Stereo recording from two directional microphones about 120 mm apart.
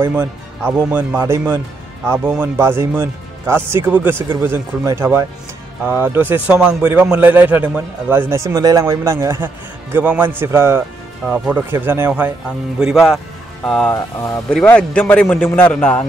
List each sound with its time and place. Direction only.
0.0 s a man's voice: 20° right (ahead or behind)
2.2 s a man's voice: 10° right (ahead or behind)
2.5 s a man's voice: 20° right (ahead or behind); by 13.2 s 5° right (ahead or behind)
13.7 s a man's voice: 5° left (ahead or behind)
13.9 s speech: 25° left (ahead or behind)
14.5 s a man's voice: 10° left (ahead or behind)